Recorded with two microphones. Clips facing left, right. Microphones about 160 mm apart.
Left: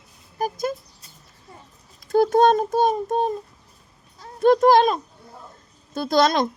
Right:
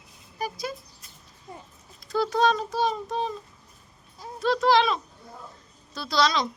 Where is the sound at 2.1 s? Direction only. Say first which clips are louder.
Left 7 dB; 50° left (ahead or behind).